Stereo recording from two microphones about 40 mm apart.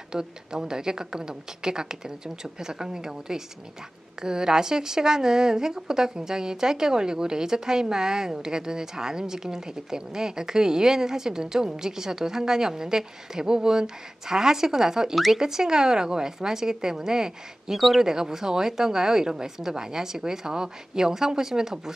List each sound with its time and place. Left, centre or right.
0.1 s a woman's voice: centre
15.1 s speech: centre
15.4 s a woman's voice: centre